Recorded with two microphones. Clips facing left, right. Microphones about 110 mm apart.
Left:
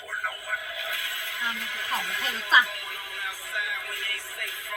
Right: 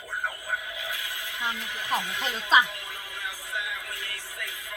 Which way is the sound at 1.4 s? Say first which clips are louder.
Right 1 dB; 20° right (ahead or behind).